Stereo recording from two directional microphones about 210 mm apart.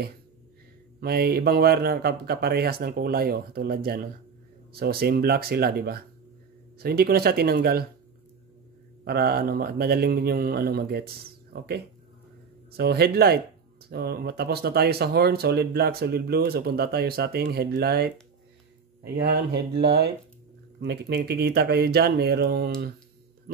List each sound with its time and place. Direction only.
1.0 s speech: 50° right (ahead or behind)
9.0 s speech: 45° right (ahead or behind)
19.2 s speech: 45° right (ahead or behind)